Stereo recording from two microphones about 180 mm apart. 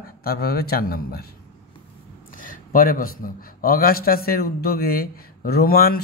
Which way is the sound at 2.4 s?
50° left (ahead or behind).